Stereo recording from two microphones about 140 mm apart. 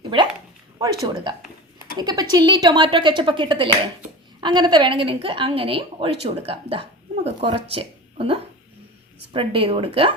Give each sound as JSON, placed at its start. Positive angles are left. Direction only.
{"t": 0.8, "sound": "a woman's voice", "side_deg": -30}